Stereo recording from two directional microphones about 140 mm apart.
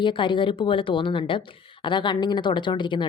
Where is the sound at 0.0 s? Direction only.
35° left (ahead or behind).